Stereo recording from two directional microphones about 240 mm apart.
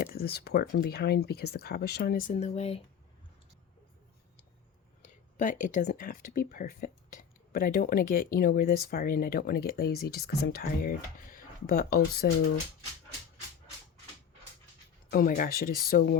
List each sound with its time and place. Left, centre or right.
0.0 s speech: left
5.0 s speech: left
15.1 s speech: left